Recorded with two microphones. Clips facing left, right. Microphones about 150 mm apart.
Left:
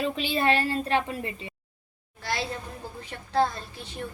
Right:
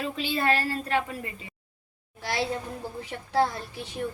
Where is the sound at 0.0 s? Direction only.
20° left (ahead or behind).